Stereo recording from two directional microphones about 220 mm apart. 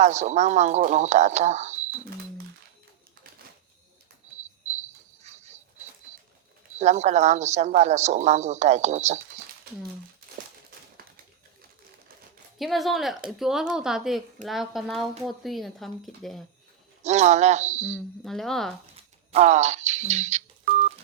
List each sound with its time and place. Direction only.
0.0 s a woman's voice: 30° right (ahead or behind)
4.4 s cricket: 30° right (ahead or behind)
6.7 s a woman's voice: 30° right (ahead or behind)
12.5 s speech: centre (ahead or behind)
17.0 s a woman's voice: 30° right (ahead or behind)
18.2 s speech: centre (ahead or behind)
19.3 s telephone dialing: 30° right (ahead or behind)